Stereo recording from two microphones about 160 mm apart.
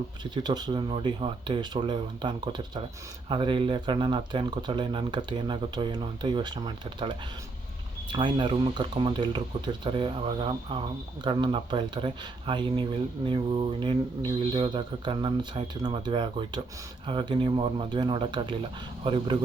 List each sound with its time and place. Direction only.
0.4 s speech: 25° right (ahead or behind)